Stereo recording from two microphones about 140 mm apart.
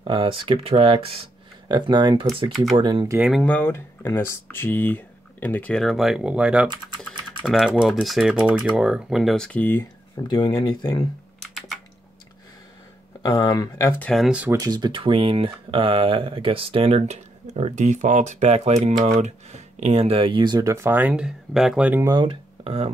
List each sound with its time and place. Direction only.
0.0 s speech: 35° right (ahead or behind)
2.5 s speech: centre (ahead or behind)
2.8 s speech: 35° right (ahead or behind)
3.2 s speech: 5° right (ahead or behind)
3.4 s speech: 15° left (ahead or behind)
10.1 s speech: 30° left (ahead or behind)
11.4 s typing: centre (ahead or behind)
13.2 s speech: 30° left (ahead or behind)
14.0 s speech: centre (ahead or behind)
14.3 s speech: 10° right (ahead or behind)
14.6 s speech: 30° right (ahead or behind); by 22.0 s 10° right (ahead or behind)
22.0 s speech: 30° right (ahead or behind)